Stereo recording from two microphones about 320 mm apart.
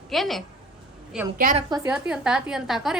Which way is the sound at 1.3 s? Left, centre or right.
Right.